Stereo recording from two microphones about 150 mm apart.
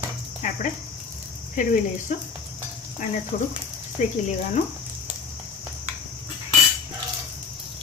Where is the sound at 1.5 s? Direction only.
60° left (ahead or behind).